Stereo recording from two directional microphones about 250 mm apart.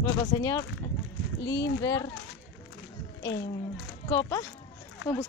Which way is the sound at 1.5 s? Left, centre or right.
Left.